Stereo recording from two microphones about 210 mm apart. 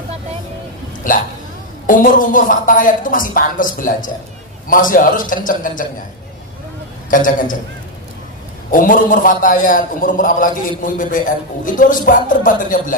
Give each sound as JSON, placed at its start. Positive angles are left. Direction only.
{"t": 1.0, "sound": "a man's voice", "side_deg": 40}
{"t": 7.1, "sound": "a man's voice", "side_deg": 40}
{"t": 8.6, "sound": "a man's voice", "side_deg": 40}